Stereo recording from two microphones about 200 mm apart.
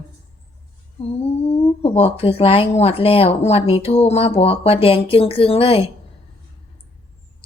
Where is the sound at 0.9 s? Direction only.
30° left (ahead or behind).